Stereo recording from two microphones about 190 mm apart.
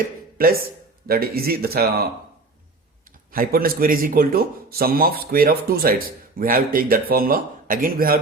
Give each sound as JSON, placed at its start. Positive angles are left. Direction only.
{"t": 0.3, "sound": "speech", "side_deg": -50}
{"t": 3.3, "sound": "speech", "side_deg": -50}